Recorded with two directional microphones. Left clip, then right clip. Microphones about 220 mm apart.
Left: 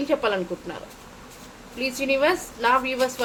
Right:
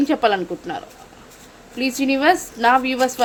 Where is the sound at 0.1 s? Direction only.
45° right (ahead or behind).